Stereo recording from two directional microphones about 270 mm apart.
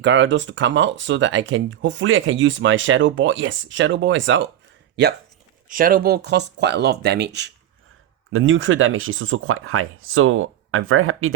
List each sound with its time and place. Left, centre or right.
0.0 s speech: right
5.6 s speech: right